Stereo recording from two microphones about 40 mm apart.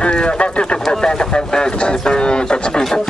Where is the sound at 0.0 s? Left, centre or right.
Left.